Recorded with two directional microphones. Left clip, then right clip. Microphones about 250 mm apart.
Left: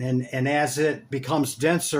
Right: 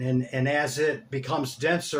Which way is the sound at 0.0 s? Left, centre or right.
Left.